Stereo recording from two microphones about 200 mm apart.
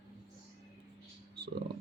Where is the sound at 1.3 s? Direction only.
55° right (ahead or behind).